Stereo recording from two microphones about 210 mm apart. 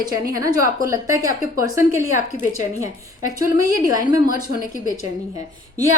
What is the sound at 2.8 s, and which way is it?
Speech, 40° left (ahead or behind).